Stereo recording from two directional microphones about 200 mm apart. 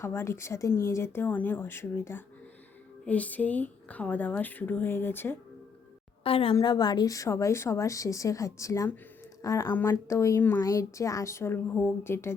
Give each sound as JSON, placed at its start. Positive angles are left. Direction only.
{"t": 0.0, "sound": "a woman's voice", "side_deg": 10}
{"t": 6.2, "sound": "a woman's voice", "side_deg": 25}